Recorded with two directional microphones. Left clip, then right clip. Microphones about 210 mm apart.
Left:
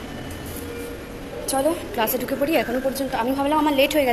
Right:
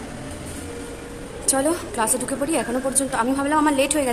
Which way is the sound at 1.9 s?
10° right (ahead or behind).